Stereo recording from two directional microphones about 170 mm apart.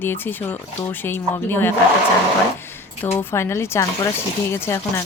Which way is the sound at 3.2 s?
15° left (ahead or behind).